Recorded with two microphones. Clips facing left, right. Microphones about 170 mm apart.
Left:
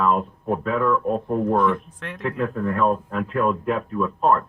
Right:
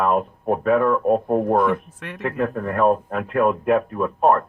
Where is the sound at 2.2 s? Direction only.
55° right (ahead or behind).